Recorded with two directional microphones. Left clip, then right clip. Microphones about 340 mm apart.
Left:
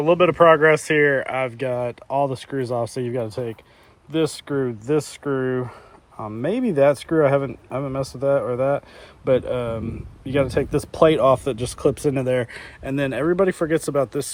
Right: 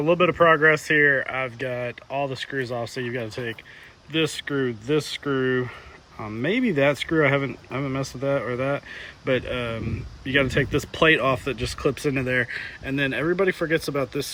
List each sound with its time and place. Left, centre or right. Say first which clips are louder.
0.0 s speech: left 4 dB; centre